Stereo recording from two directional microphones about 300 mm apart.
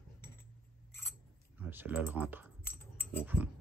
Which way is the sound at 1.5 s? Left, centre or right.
Centre.